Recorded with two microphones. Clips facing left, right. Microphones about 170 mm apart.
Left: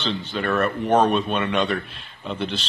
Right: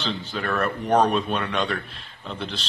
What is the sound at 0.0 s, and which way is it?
Speech, centre (ahead or behind).